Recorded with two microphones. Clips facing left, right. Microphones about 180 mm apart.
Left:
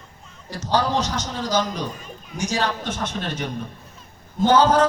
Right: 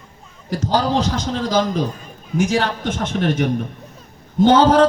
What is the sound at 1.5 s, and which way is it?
A man's voice, 50° right (ahead or behind).